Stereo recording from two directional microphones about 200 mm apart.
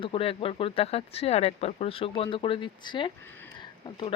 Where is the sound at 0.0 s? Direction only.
25° left (ahead or behind).